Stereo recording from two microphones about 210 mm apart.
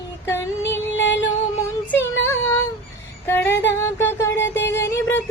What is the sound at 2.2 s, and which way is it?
Child singing, 10° left (ahead or behind).